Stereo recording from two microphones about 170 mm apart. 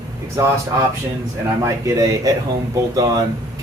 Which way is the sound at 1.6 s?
20° right (ahead or behind).